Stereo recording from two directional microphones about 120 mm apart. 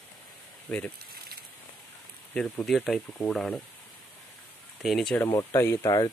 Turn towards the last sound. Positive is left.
turn(degrees=25)  # may be behind; listen again after turning